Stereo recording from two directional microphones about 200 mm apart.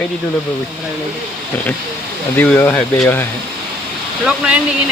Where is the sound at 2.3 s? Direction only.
10° left (ahead or behind).